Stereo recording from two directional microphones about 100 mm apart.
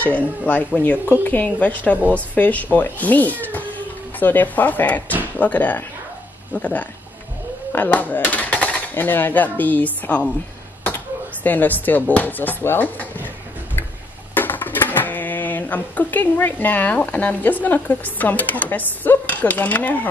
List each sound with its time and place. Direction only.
0.0 s speech: 15° left (ahead or behind)
11.4 s speech: 15° left (ahead or behind)
14.3 s speech: 20° left (ahead or behind)